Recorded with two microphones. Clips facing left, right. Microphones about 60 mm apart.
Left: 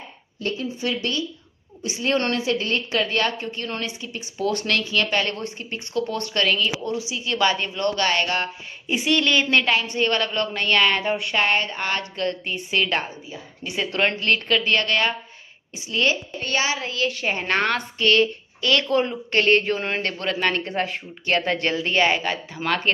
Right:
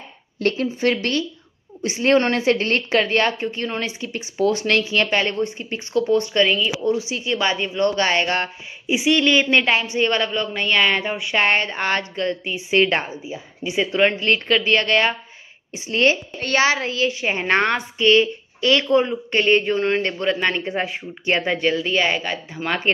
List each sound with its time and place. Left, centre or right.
0.4 s a woman's voice: right
0.8 s a woman's voice: right
6.1 s speech: centre
6.9 s a woman's voice: right
7.2 s speech: right
8.8 s speech: centre
11.3 s a woman's voice: right
13.7 s speech: centre
14.2 s a woman's voice: right
17.2 s speech: right
18.9 s speech: centre
20.0 s speech: centre